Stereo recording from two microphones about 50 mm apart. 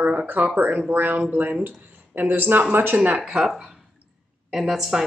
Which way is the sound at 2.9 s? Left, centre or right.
Right.